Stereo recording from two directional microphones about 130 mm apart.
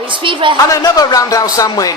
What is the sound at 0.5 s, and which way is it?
Speech, 30° left (ahead or behind).